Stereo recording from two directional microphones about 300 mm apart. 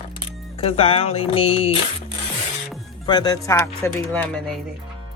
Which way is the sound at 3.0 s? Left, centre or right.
Centre.